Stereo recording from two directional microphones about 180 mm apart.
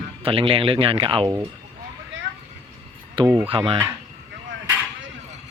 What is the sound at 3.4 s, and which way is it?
Speech, 30° right (ahead or behind).